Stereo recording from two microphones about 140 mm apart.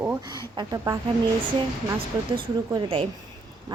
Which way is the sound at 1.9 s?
35° right (ahead or behind).